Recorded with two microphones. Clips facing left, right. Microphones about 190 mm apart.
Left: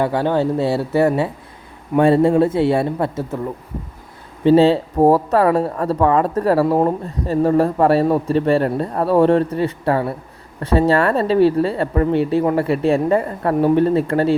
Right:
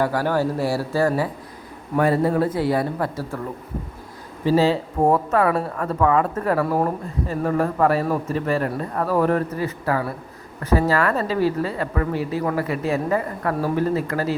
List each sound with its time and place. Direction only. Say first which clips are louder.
0.0 s speech: left 3 dB; 25° left (ahead or behind)
4.4 s speech: left 6 dB; 30° left (ahead or behind)